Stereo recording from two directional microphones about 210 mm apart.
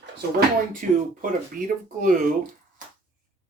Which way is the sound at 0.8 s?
40° right (ahead or behind).